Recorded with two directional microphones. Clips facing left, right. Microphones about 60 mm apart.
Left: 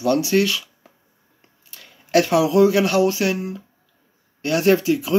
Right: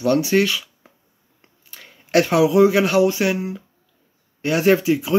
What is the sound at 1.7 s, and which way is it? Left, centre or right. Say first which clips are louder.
Speech: even; right.